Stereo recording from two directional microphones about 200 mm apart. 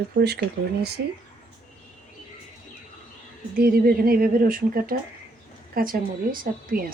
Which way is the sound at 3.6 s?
45° right (ahead or behind).